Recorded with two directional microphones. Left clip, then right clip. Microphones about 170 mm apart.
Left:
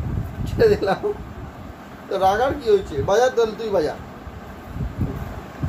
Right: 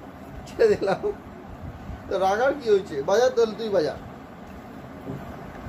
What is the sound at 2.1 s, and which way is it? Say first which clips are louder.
Speech: left 3 dB; 20° left (ahead or behind).